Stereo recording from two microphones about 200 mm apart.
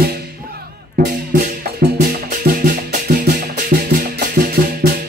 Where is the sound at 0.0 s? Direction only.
50° right (ahead or behind).